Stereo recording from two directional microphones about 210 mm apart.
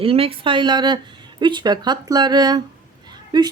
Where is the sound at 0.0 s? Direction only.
25° right (ahead or behind).